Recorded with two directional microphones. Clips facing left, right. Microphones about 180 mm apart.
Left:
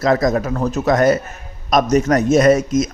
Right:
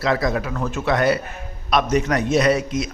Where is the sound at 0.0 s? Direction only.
45° left (ahead or behind).